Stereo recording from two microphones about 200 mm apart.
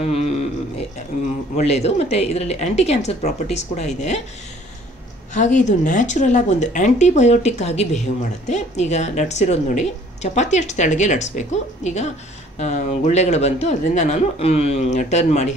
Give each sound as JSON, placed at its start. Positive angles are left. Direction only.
{"t": 0.0, "sound": "a sound", "side_deg": 30}
{"t": 1.6, "sound": "speech", "side_deg": 35}
{"t": 5.3, "sound": "speech", "side_deg": 40}